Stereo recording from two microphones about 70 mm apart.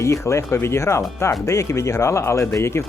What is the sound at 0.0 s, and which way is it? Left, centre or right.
Speech, left.